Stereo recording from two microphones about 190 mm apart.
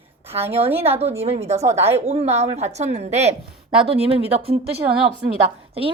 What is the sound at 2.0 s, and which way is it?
A woman's voice, 35° right (ahead or behind).